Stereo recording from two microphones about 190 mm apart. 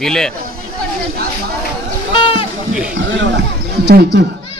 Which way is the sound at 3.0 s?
75° right (ahead or behind).